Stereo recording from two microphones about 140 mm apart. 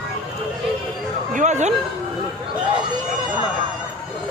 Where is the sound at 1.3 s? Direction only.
60° right (ahead or behind).